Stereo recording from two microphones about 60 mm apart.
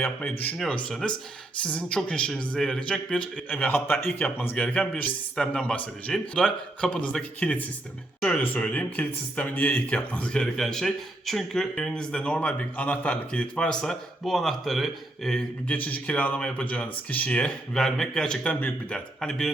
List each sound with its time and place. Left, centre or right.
0.0 s a man's voice: left
0.9 s speech: centre
3.5 s a man's voice: left
4.5 s speech: centre
14.3 s speech: centre
15.4 s speech: left
17.7 s speech: centre